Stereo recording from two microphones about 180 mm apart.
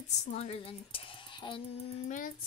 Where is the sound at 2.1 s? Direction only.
50° left (ahead or behind).